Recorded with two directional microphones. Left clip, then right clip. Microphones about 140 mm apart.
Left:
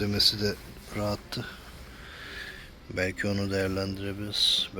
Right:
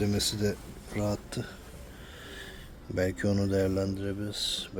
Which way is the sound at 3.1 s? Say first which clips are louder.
Right 1 dB; 30° right (ahead or behind).